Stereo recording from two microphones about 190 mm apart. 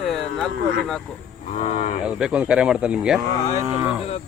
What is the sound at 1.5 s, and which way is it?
Moo, 35° left (ahead or behind).